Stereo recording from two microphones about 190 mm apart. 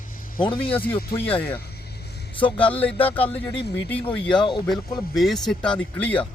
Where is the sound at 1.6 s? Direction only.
55° left (ahead or behind).